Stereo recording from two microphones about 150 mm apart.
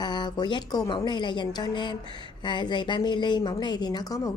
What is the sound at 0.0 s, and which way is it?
A woman's voice, 30° left (ahead or behind).